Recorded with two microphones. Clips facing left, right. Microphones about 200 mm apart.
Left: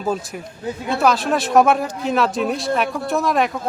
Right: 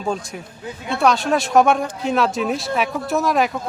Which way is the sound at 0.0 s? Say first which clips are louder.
Left 1 dB; 5° left (ahead or behind).